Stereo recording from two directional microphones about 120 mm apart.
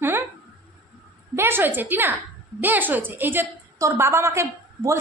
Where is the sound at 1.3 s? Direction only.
20° right (ahead or behind).